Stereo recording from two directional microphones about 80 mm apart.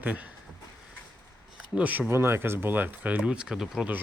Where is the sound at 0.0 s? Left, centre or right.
Centre.